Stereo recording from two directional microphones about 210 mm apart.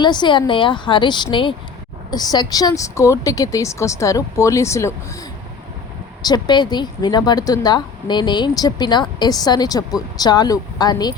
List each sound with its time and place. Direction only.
0.0 s a woman's voice: 20° left (ahead or behind)
6.2 s speech: 20° left (ahead or behind)